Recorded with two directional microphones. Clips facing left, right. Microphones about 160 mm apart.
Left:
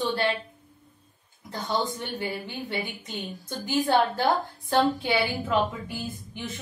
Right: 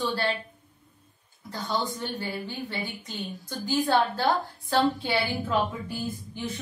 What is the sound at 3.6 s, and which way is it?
A woman's voice, 20° left (ahead or behind).